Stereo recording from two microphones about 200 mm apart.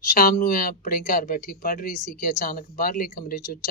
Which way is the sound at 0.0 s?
45° left (ahead or behind).